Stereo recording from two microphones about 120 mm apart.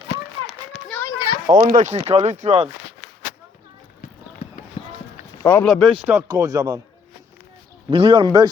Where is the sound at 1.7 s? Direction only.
90° right; by 2.7 s 75° right (ahead or behind).